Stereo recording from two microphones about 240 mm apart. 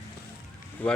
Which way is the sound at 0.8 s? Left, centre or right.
Centre.